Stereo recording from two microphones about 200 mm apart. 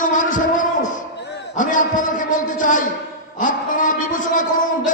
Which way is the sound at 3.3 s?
40° left (ahead or behind).